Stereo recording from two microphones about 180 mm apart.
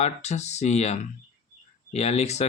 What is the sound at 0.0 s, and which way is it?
Speech, 40° left (ahead or behind).